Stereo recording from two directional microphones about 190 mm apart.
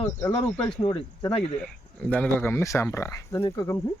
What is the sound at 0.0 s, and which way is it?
Speech, 20° left (ahead or behind).